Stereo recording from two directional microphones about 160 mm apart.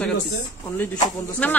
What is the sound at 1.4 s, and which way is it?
Speech, 10° left (ahead or behind).